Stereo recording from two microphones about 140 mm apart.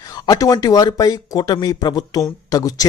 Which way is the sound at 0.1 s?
25° left (ahead or behind).